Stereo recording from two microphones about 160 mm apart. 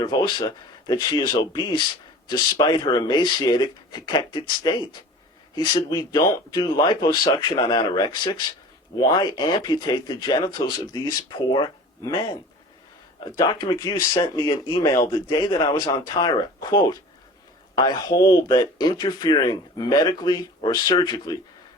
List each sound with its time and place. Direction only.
0.0 s speech: 30° left (ahead or behind)
10.8 s speech: 15° left (ahead or behind)
11.3 s speech: 30° left (ahead or behind)